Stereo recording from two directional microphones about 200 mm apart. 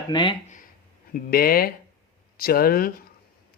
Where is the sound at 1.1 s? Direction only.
50° left (ahead or behind).